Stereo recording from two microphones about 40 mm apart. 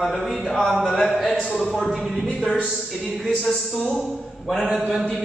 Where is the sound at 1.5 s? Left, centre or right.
Centre.